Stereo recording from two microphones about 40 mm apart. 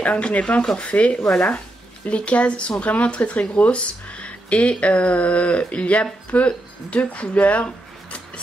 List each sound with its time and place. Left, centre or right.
0.0 s speech: left